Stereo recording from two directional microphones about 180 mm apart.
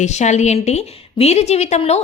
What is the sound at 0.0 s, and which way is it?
A woman's voice, 40° left (ahead or behind).